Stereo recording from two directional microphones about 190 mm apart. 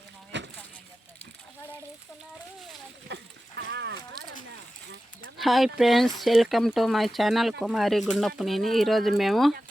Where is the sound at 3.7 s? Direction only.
65° right (ahead or behind).